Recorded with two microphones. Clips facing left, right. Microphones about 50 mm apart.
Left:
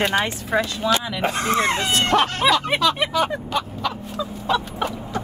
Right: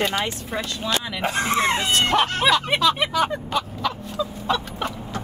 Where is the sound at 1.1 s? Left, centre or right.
Centre.